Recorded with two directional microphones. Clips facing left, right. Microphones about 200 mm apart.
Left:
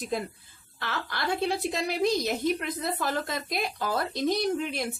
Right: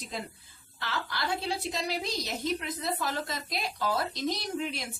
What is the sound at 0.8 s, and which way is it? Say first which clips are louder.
A woman's voice: left 1 dB; 55° left (ahead or behind).